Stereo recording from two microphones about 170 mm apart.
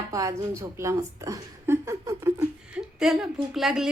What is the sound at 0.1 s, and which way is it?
A woman's voice, 20° right (ahead or behind).